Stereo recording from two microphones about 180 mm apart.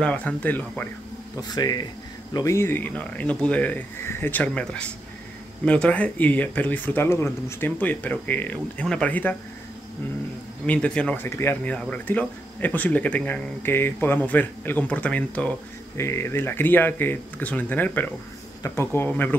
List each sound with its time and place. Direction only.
0.0 s speech: 5° left (ahead or behind)
1.4 s speech: 20° left (ahead or behind)
10.7 s speech: 5° left (ahead or behind)